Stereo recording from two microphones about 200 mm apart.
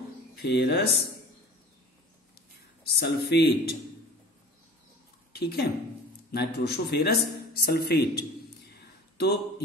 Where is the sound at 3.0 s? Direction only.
55° left (ahead or behind).